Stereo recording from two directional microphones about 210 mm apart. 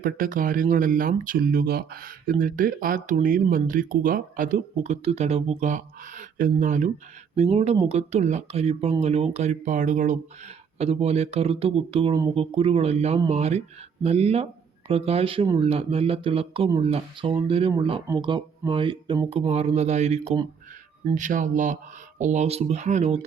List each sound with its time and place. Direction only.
0.0 s speech: 40° right (ahead or behind)
21.2 s speech: 35° right (ahead or behind)